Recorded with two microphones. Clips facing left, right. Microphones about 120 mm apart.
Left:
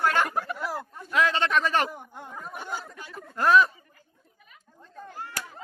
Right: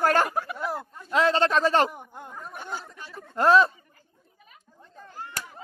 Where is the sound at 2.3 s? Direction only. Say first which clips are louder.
Left 3 dB; centre (ahead or behind).